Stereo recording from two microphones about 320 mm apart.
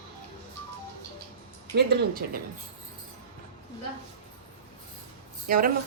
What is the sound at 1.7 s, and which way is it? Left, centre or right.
Speech, right.